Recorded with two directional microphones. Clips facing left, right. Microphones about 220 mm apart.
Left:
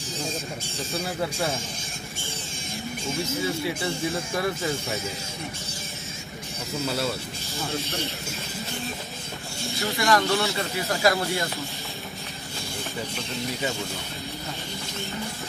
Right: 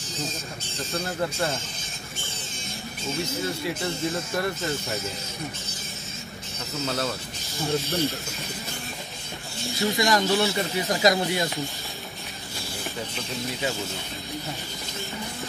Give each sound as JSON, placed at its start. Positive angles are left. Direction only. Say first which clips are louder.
{"t": 0.7, "sound": "speech", "louder": "right 1 dB", "side_deg": 0}
{"t": 3.3, "sound": "speech", "louder": "left 1 dB", "side_deg": 0}
{"t": 6.9, "sound": "speech", "louder": "even", "side_deg": 5}
{"t": 9.7, "sound": "speech", "louder": "right 4 dB", "side_deg": 0}
{"t": 9.9, "sound": "speech", "louder": "left 1 dB", "side_deg": -15}